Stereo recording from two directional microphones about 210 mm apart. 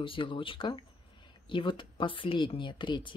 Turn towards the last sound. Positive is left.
turn(degrees=25)  # may be behind; listen again after turning